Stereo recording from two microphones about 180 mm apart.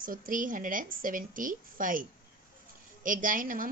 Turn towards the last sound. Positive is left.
turn(degrees=-50)  # may be behind; listen again after turning